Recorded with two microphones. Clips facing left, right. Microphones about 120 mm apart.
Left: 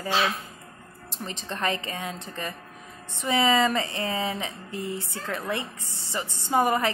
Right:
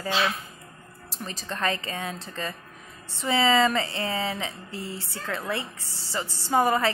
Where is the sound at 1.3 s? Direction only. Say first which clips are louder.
Even; 25° left (ahead or behind).